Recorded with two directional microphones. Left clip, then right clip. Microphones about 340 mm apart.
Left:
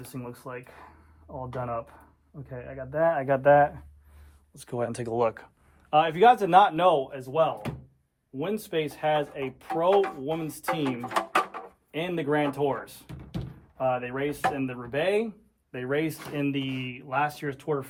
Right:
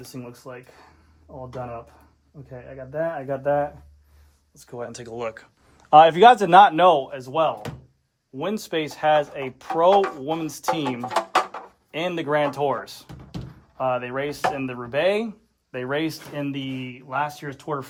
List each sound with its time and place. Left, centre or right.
0.1 s speech: centre
1.3 s speech: centre
5.7 s speech: right
11.9 s speech: centre